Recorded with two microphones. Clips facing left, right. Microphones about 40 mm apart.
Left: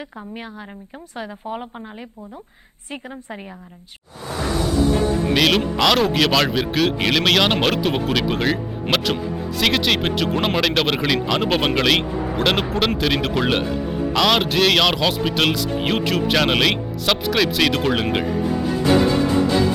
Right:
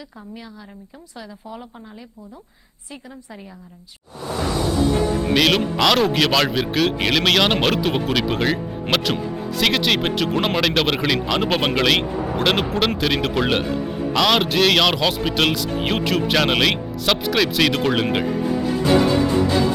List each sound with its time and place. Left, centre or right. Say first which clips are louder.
1.1 s a woman's voice: left 6 dB; left
5.3 s speech: right 1 dB; centre